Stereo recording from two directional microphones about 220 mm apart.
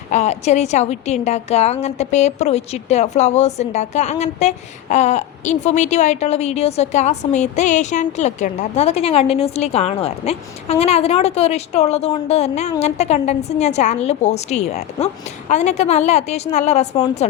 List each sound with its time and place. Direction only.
0.1 s a woman's voice: 30° left (ahead or behind)